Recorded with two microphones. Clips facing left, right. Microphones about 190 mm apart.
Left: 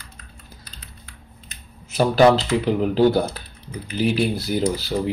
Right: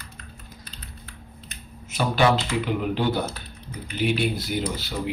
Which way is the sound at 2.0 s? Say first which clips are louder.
Left 6 dB; 40° left (ahead or behind).